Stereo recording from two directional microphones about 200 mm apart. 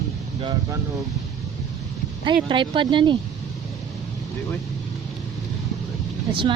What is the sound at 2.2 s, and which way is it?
Speech, 25° right (ahead or behind).